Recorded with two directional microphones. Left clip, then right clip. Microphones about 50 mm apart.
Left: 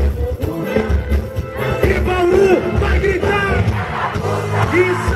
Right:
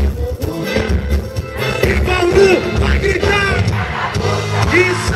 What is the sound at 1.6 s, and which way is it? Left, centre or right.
Music, right.